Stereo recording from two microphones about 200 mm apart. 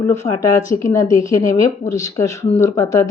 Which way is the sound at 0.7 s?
15° left (ahead or behind).